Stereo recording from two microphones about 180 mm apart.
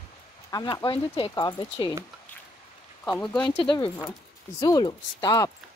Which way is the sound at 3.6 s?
30° left (ahead or behind).